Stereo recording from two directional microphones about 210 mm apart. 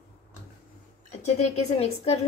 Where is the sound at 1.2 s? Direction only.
30° left (ahead or behind).